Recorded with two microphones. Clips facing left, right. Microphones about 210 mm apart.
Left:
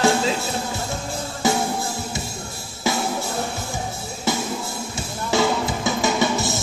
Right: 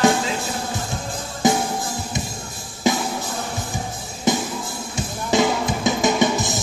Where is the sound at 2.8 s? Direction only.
20° right (ahead or behind).